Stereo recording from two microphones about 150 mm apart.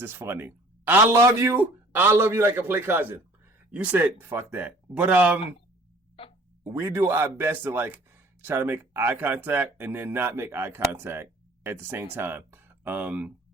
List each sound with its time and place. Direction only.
0.0 s speech: 15° right (ahead or behind)
6.7 s speech: 20° right (ahead or behind)